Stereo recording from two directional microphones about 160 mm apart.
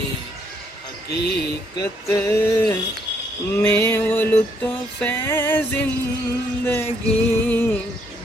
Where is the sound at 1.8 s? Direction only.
20° left (ahead or behind).